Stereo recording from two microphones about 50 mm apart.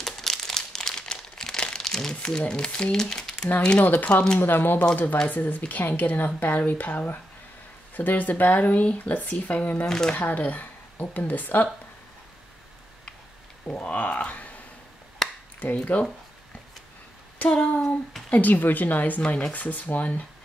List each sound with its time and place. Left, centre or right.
0.0 s crumpling: centre
3.8 s speech: left
9.8 s speech: centre
10.1 s speech: left
13.7 s speech: left
15.2 s finger snapping: centre
15.6 s speech: left
17.4 s a sound: left
18.3 s speech: left
19.2 s a sound: left
19.5 s speech: left